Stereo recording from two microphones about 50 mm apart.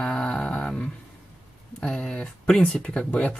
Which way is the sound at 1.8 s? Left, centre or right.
Centre.